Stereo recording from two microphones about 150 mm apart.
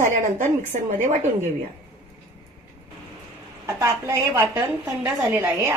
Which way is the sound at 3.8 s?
20° right (ahead or behind).